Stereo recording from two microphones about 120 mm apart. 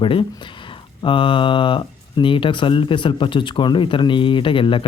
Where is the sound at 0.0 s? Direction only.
45° left (ahead or behind).